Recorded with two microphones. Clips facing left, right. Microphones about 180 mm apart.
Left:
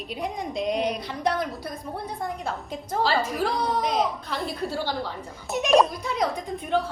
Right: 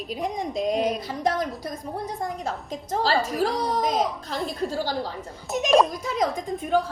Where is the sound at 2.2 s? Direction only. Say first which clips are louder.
Right 1 dB; 40° right (ahead or behind).